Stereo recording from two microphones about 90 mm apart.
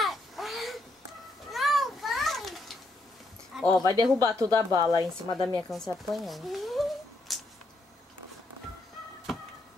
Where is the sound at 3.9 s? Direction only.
45° right (ahead or behind).